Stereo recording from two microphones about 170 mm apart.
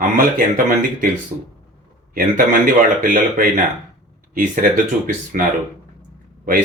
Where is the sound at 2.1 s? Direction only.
55° right (ahead or behind).